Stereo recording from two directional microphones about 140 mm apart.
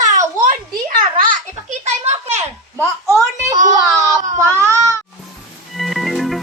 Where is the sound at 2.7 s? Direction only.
20° left (ahead or behind).